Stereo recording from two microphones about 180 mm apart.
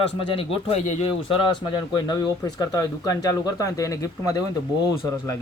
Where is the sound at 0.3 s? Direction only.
35° left (ahead or behind).